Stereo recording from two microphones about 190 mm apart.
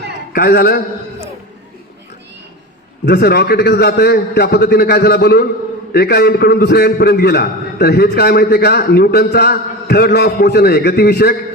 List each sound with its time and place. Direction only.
0.3 s a man's voice: 55° left (ahead or behind)
3.1 s a man's voice: 60° left (ahead or behind)